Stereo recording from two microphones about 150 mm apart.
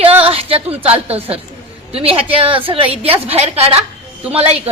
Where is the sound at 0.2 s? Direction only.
40° right (ahead or behind).